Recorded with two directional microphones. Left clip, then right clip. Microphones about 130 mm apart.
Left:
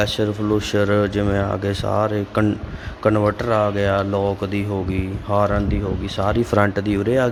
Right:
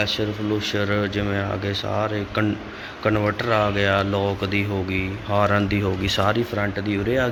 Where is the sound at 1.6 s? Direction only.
65° left (ahead or behind).